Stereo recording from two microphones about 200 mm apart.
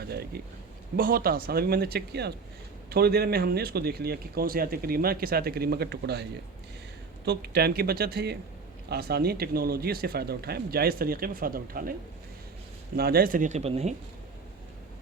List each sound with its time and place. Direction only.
0.0 s speech: 50° right (ahead or behind)
7.3 s speech: 55° right (ahead or behind)
13.0 s speech: 50° right (ahead or behind); by 13.9 s 30° right (ahead or behind)